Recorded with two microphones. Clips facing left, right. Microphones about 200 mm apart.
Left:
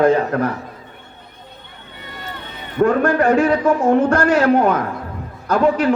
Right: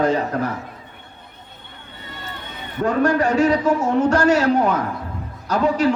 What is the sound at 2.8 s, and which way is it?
A man's voice, 55° left (ahead or behind).